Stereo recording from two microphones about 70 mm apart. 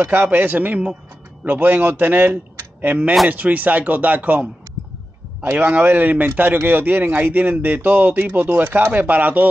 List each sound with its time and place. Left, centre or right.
0.0 s a man's voice: right